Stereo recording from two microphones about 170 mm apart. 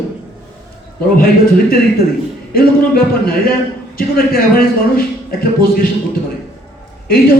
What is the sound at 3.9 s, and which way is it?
A man's voice, 60° left (ahead or behind).